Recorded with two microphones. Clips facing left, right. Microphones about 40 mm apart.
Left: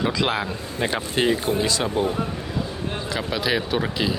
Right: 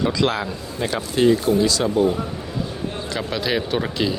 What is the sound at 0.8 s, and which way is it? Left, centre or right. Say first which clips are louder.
Speech: right 3 dB; left.